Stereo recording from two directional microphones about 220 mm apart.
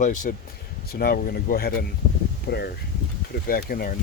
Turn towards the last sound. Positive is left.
turn(degrees=40)  # may be behind; listen again after turning